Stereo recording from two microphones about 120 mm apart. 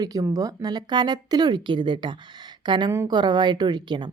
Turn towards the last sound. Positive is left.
turn(degrees=-40)  # may be behind; listen again after turning